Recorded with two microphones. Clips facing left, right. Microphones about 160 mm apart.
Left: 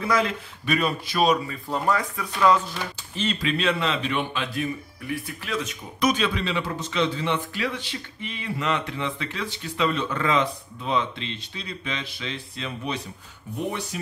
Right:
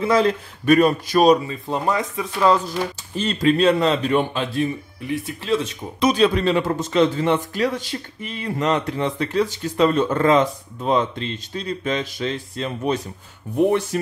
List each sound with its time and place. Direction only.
0.0 s speech: 30° right (ahead or behind)
0.7 s speech: 45° right (ahead or behind)
1.5 s speech: 20° right (ahead or behind)
3.2 s a man's voice: 40° right (ahead or behind)
4.6 s speech: 25° right (ahead or behind); by 13.8 s 50° right (ahead or behind)